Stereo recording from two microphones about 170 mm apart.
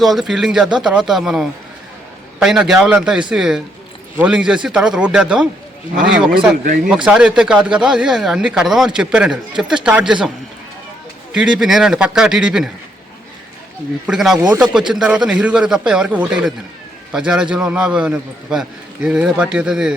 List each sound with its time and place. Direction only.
0.0 s speech: centre (ahead or behind)
14.1 s speech: centre (ahead or behind)
14.3 s speech: 15° right (ahead or behind)
14.6 s speech: centre (ahead or behind)